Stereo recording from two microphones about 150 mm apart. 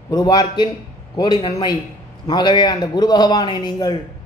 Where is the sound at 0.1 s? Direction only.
25° left (ahead or behind).